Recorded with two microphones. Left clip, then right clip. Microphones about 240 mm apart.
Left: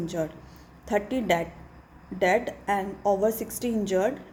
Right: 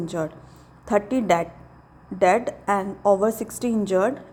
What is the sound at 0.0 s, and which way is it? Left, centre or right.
A woman's voice, right.